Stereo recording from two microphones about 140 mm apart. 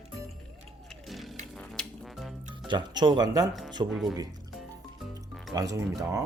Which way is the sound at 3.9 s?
Centre (ahead or behind).